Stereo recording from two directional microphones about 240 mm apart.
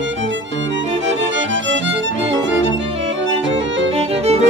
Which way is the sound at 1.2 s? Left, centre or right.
Right.